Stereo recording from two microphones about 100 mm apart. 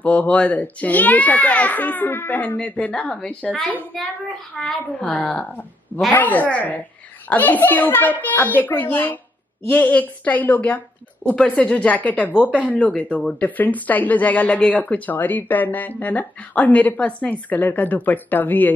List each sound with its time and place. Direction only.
0.0 s speech: 15° left (ahead or behind)
4.6 s speech: 5° left (ahead or behind)
12.3 s speech: 10° right (ahead or behind)
12.6 s speech: 15° left (ahead or behind)